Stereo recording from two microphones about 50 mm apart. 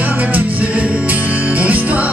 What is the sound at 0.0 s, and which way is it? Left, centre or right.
Music, right.